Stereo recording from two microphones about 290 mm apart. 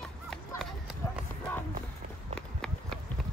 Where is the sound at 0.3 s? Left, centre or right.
Centre.